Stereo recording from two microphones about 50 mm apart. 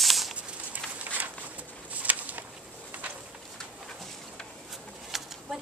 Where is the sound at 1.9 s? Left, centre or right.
Right.